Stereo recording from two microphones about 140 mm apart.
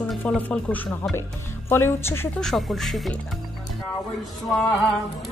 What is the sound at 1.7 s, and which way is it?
Speech, 15° left (ahead or behind).